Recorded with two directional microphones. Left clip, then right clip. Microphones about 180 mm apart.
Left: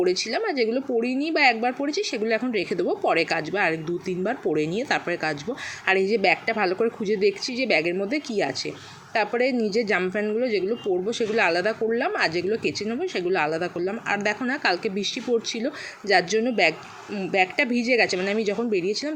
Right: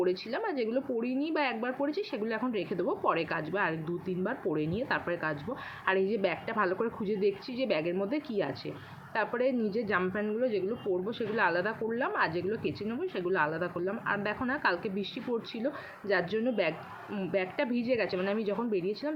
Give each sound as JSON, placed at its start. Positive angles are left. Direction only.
{"t": 0.3, "sound": "a woman's voice", "side_deg": 20}